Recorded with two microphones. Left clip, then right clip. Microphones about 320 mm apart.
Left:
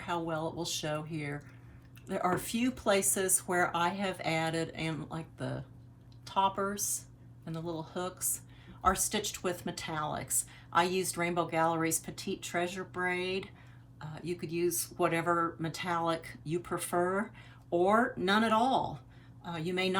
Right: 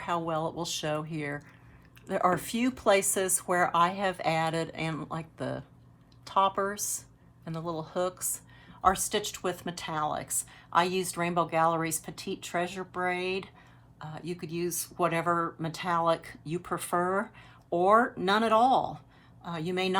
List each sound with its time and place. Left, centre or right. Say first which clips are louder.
0.0 s speech: right 4 dB; centre